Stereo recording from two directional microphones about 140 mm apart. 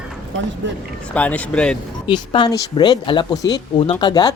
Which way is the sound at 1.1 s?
10° left (ahead or behind).